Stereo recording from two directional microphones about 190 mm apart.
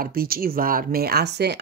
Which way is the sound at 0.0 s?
50° right (ahead or behind).